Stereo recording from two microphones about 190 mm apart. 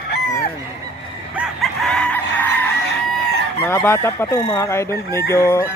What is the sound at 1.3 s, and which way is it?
Chicken, centre (ahead or behind).